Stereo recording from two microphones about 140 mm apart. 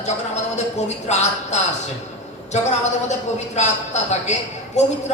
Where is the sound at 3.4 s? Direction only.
55° left (ahead or behind).